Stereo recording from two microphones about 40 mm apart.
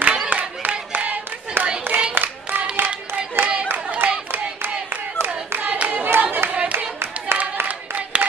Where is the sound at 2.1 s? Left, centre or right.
Right.